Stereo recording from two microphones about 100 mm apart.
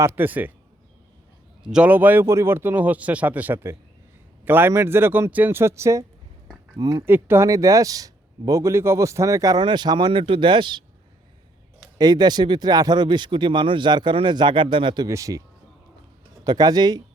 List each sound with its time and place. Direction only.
0.0 s speech: 20° right (ahead or behind)
1.6 s a man's voice: 5° right (ahead or behind)
1.9 s speech: 15° right (ahead or behind)
6.7 s a man's voice: 40° right (ahead or behind)
7.0 s speech: 20° right (ahead or behind)
7.4 s a man's voice: 35° right (ahead or behind)
9.6 s speech: 50° right (ahead or behind)
10.1 s speech: 60° right (ahead or behind)
11.9 s speech: 45° right (ahead or behind)
15.0 s a man's voice: 35° right (ahead or behind)